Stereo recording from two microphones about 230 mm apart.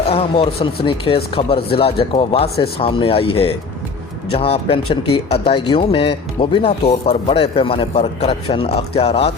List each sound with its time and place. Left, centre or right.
0.1 s speech: left